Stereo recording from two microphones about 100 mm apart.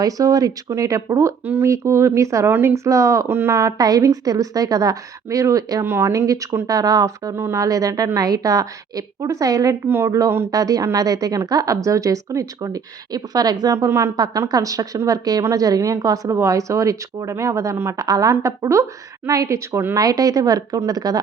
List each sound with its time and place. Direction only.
0.0 s a woman's voice: 35° right (ahead or behind)
9.8 s a woman's voice: 25° right (ahead or behind); by 13.7 s 40° right (ahead or behind)
13.7 s a woman's voice: 25° right (ahead or behind)